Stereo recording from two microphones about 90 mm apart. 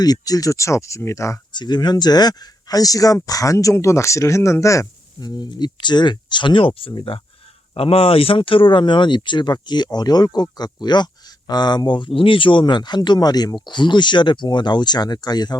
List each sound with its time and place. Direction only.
0.0 s speech: 45° left (ahead or behind)
1.5 s speech: 55° left (ahead or behind); by 5.3 s 35° left (ahead or behind)
5.3 s speech: 55° left (ahead or behind)